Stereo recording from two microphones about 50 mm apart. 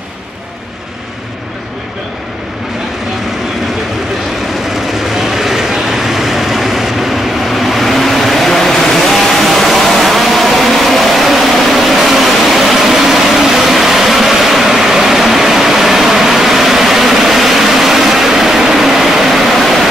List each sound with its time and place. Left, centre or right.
5.1 s vehicle: centre